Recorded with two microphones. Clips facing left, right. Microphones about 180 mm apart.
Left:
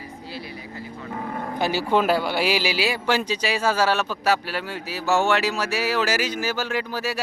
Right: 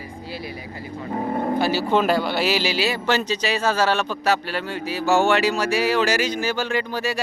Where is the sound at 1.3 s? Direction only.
30° right (ahead or behind).